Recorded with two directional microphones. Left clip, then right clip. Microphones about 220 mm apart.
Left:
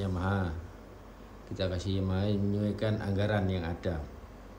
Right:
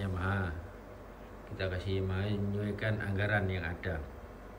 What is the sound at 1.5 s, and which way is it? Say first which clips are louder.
Speech: left 2 dB; 20° left (ahead or behind).